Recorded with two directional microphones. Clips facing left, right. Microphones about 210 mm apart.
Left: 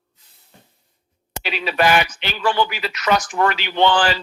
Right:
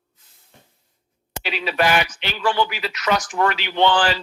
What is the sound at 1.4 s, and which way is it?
Speech, 50° left (ahead or behind).